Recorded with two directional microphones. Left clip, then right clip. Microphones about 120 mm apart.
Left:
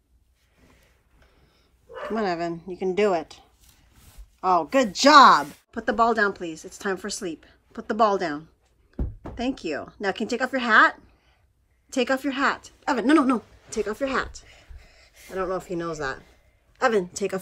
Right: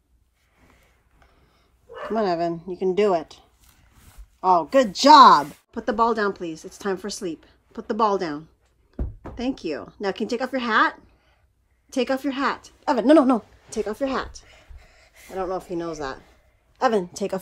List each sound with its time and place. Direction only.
2.0 s speech: 40° right (ahead or behind)
5.5 s a woman's voice: 25° right (ahead or behind)
17.1 s a woman's voice: 35° right (ahead or behind)